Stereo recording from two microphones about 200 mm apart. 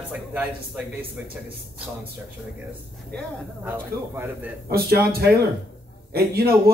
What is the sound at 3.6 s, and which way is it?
Speech, 10° right (ahead or behind).